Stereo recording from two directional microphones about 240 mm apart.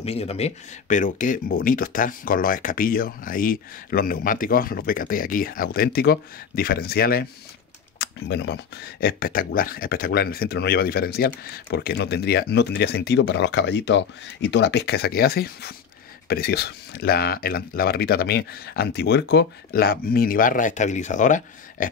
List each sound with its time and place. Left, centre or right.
0.0 s speech: left